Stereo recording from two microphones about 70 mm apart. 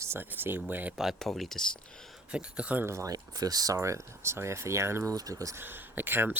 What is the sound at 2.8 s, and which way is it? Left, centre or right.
Speech, right.